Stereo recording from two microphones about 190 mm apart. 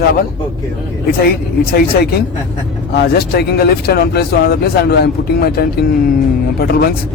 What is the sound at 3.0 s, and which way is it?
A man's voice, 55° left (ahead or behind).